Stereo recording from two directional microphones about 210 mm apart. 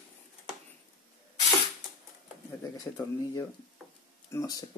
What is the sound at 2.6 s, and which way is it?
Speech, 15° left (ahead or behind).